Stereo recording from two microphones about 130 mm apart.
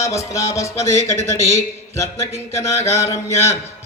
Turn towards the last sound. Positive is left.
turn(degrees=20)  # may be behind; listen again after turning